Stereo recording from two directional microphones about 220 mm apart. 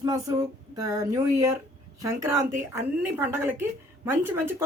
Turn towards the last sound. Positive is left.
turn(degrees=-10)  # may be behind; listen again after turning